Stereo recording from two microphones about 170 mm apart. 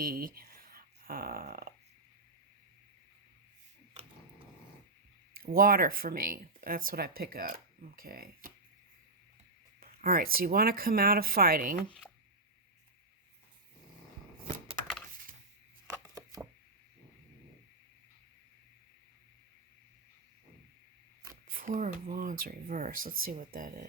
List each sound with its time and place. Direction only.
0.0 s speech: 60° right (ahead or behind)
5.4 s speech: 60° right (ahead or behind)
9.8 s speech: 55° right (ahead or behind)
14.4 s a sound: 35° right (ahead or behind)
15.9 s chopping: 20° right (ahead or behind)
21.4 s speech: 55° right (ahead or behind)